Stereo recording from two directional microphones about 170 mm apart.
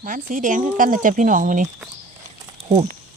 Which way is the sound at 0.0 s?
50° right (ahead or behind).